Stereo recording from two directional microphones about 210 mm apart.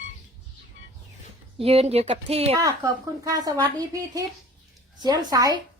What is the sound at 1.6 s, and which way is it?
Speech, 30° right (ahead or behind).